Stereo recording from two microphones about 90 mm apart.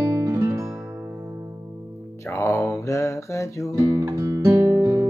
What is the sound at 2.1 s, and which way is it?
Music, 30° left (ahead or behind).